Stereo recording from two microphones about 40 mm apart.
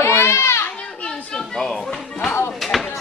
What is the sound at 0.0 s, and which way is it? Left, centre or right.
Children playing, left.